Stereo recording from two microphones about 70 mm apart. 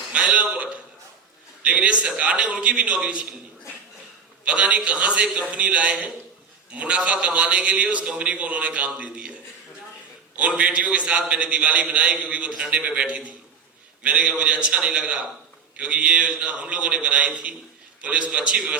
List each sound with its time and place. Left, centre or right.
0.1 s a man's voice: centre
4.4 s a man's voice: centre
10.3 s a man's voice: centre